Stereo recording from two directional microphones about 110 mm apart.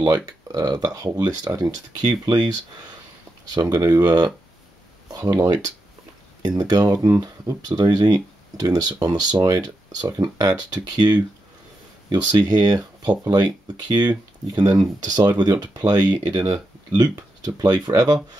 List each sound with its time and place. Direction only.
0.0 s speech: 35° right (ahead or behind)
3.5 s speech: 35° right (ahead or behind)